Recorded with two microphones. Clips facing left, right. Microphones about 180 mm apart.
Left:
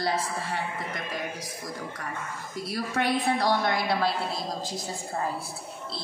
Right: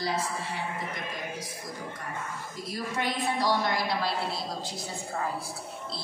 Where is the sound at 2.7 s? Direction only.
65° left (ahead or behind).